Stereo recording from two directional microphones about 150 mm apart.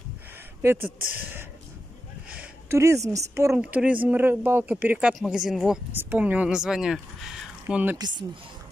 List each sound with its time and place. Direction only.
0.6 s speech: 15° right (ahead or behind)
2.2 s a sound: 10° right (ahead or behind)
2.8 s a woman's voice: 20° right (ahead or behind)